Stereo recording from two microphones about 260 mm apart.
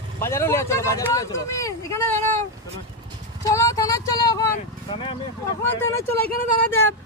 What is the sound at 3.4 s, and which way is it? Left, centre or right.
Speech, centre.